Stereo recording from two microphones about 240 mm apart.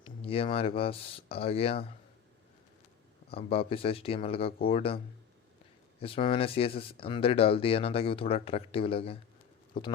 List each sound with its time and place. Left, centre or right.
0.0 s speech: left
3.3 s speech: left
6.0 s speech: left